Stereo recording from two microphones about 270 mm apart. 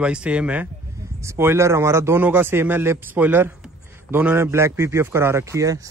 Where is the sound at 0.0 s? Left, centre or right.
Centre.